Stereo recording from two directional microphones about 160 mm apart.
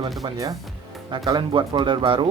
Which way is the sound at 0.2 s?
25° right (ahead or behind).